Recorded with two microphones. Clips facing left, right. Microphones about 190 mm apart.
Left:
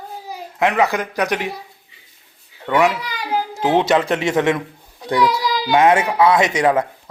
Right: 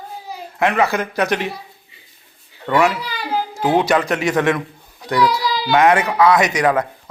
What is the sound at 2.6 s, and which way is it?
A man's voice, 15° left (ahead or behind).